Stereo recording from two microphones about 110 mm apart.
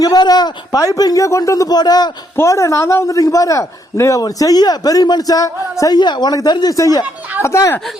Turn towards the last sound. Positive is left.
turn(degrees=25)  # may be behind; listen again after turning